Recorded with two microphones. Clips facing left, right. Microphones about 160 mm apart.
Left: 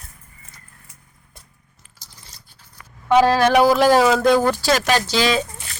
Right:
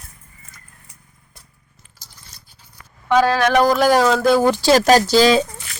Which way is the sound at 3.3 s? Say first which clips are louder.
Left 1 dB; 35° left (ahead or behind).